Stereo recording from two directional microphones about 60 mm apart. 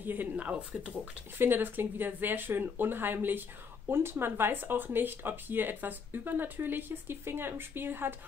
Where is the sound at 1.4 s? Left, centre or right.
Right.